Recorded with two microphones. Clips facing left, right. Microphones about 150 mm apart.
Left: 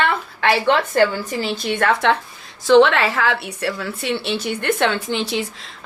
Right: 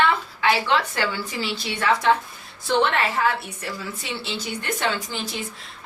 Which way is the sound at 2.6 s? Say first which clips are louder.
Left 9 dB; 90° left.